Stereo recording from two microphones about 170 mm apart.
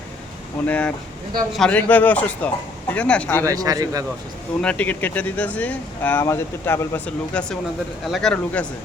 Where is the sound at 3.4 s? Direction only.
20° right (ahead or behind).